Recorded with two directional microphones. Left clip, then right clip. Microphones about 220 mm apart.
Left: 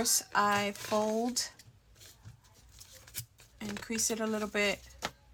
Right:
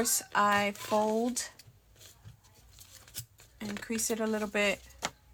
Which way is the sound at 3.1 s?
10° right (ahead or behind).